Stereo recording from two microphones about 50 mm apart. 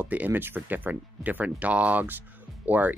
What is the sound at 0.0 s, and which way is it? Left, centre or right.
Speech, right.